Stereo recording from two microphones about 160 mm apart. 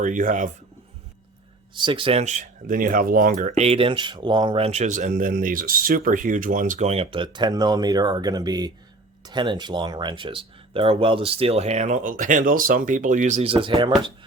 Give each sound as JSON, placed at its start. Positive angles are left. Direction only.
{"t": 0.0, "sound": "speech", "side_deg": -55}
{"t": 1.8, "sound": "speech", "side_deg": -30}
{"t": 2.2, "sound": "speech", "side_deg": -50}
{"t": 13.5, "sound": "speech", "side_deg": -35}